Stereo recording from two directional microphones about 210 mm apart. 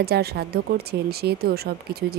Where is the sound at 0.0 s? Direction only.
50° right (ahead or behind).